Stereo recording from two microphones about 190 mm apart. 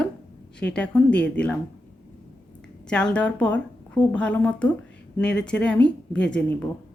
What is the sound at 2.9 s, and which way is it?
Speech, 5° left (ahead or behind).